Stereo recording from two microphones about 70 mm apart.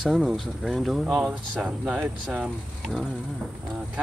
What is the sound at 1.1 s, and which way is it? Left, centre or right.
Speech, centre.